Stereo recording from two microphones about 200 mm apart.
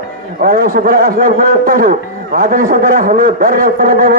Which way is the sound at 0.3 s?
45° right (ahead or behind).